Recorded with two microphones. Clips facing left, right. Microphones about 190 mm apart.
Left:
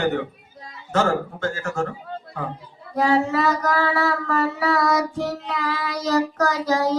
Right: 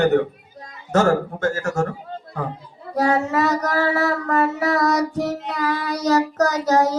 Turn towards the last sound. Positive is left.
turn(degrees=-40)  # may be behind; listen again after turning